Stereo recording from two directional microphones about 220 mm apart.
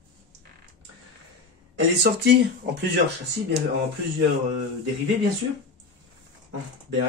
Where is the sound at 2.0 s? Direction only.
50° right (ahead or behind).